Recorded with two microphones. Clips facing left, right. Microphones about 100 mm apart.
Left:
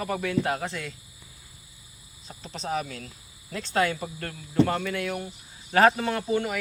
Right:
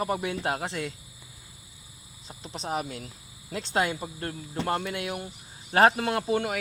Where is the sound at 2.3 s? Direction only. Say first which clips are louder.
Left 1 dB; 20° right (ahead or behind).